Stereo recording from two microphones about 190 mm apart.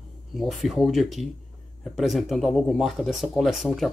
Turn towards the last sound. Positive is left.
turn(degrees=0)  # may be behind; listen again after turning